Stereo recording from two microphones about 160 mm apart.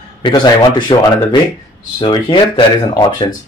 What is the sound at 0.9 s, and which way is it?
Speech, 30° left (ahead or behind).